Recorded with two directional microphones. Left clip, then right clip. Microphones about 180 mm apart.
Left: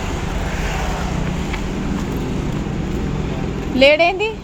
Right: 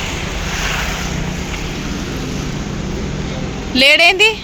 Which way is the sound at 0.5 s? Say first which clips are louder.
Right 7 dB; 45° left (ahead or behind).